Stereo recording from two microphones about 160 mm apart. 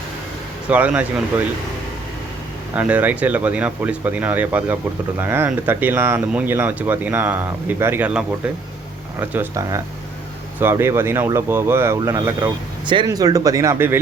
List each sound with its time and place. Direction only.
0.7 s speech: 10° right (ahead or behind)
2.7 s speech: 10° right (ahead or behind)
9.3 s speech: 15° right (ahead or behind)
12.8 s speech: 30° right (ahead or behind); by 14.0 s 15° right (ahead or behind)